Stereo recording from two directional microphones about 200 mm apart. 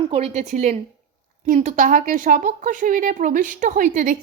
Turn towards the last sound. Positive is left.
turn(degrees=-40)  # may be behind; listen again after turning